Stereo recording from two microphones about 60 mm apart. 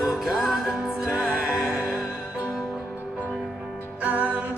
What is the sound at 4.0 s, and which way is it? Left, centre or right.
Music, right.